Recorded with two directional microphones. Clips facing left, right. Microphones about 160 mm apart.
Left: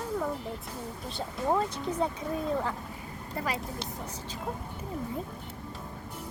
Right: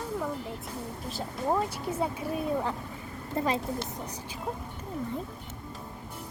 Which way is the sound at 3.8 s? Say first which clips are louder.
Right 1 dB; 15° right (ahead or behind).